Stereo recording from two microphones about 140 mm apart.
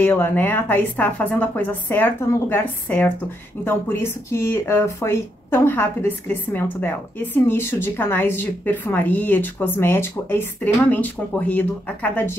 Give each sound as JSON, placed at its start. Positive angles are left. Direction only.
{"t": 0.0, "sound": "a woman's voice", "side_deg": 15}